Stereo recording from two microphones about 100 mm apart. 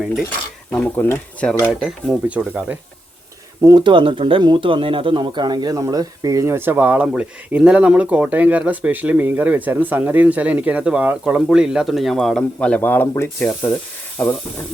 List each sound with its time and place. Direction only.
0.7 s speech: 20° left (ahead or behind)
1.8 s speech: 5° right (ahead or behind)
2.5 s speech: 15° right (ahead or behind)
3.6 s speech: 40° right (ahead or behind)
3.8 s speech: 60° right (ahead or behind); by 14.3 s 20° left (ahead or behind)